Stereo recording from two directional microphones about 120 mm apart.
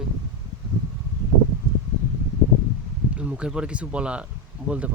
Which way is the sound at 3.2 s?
10° right (ahead or behind).